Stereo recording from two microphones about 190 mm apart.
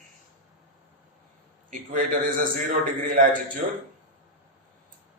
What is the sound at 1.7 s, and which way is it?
Speech, 45° right (ahead or behind).